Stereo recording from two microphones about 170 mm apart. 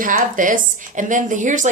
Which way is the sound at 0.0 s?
50° right (ahead or behind).